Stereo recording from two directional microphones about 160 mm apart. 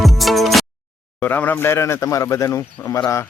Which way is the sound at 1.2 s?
10° left (ahead or behind).